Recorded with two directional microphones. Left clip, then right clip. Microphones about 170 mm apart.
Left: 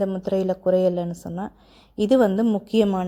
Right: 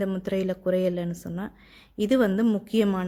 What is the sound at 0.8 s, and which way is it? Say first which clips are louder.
Speech: left 5 dB; 10° left (ahead or behind).